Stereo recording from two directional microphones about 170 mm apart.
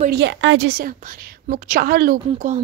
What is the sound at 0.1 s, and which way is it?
A woman's voice, 90° right.